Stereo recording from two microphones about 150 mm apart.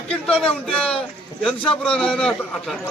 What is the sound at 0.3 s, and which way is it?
A man's voice, 5° left (ahead or behind).